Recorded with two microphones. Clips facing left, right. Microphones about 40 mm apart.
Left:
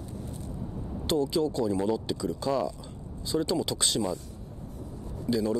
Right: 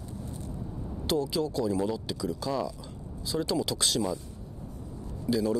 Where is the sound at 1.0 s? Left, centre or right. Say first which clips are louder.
Left 2 dB; left.